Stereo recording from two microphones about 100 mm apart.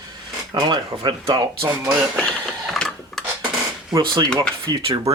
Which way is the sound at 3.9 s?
45° right (ahead or behind).